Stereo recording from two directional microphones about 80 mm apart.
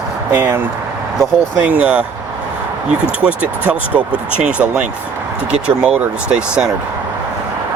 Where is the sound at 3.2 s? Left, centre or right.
Centre.